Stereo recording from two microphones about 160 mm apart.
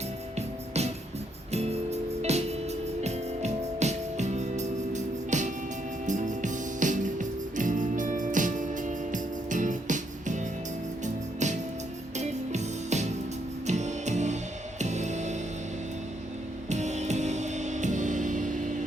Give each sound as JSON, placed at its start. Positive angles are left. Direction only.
{"t": 0.3, "sound": "music", "side_deg": -45}
{"t": 16.6, "sound": "music", "side_deg": -45}